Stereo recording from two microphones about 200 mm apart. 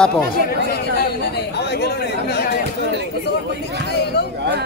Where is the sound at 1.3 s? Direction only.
55° left (ahead or behind).